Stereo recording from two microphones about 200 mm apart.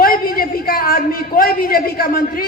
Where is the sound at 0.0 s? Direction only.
45° left (ahead or behind).